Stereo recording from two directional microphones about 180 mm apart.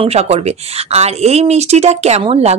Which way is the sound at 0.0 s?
35° right (ahead or behind).